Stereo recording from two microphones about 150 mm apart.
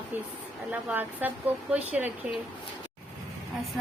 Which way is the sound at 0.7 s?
10° right (ahead or behind).